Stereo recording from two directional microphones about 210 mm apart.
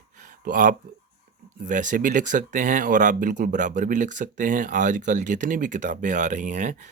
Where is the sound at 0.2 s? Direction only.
40° right (ahead or behind).